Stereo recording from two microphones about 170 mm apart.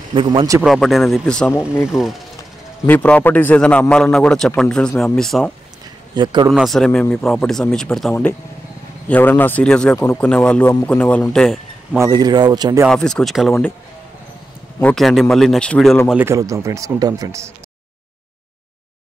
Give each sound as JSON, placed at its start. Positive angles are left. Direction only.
{"t": 0.1, "sound": "a man's voice", "side_deg": -30}
{"t": 0.6, "sound": "speech", "side_deg": 0}
{"t": 2.9, "sound": "a man's voice", "side_deg": 10}
{"t": 6.1, "sound": "a man's voice", "side_deg": -25}
{"t": 6.5, "sound": "a man's voice", "side_deg": 0}
{"t": 12.0, "sound": "a man's voice", "side_deg": -20}
{"t": 12.8, "sound": "speech", "side_deg": 5}
{"t": 14.8, "sound": "speech", "side_deg": 5}
{"t": 16.1, "sound": "speech", "side_deg": -10}